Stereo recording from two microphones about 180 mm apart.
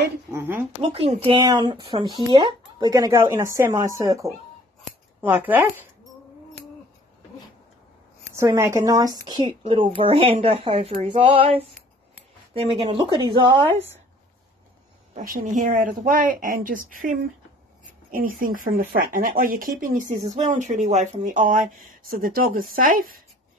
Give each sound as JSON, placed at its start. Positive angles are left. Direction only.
{"t": 0.3, "sound": "speech", "side_deg": -15}
{"t": 0.9, "sound": "a woman's voice", "side_deg": -35}
{"t": 8.4, "sound": "a woman's voice", "side_deg": -15}
{"t": 12.9, "sound": "a woman's voice", "side_deg": -20}
{"t": 15.1, "sound": "speech", "side_deg": -45}